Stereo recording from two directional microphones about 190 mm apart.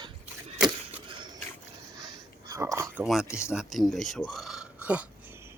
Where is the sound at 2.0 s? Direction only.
20° right (ahead or behind).